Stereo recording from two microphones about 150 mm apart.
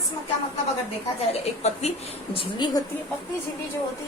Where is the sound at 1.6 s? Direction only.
45° left (ahead or behind); by 2.8 s 30° left (ahead or behind).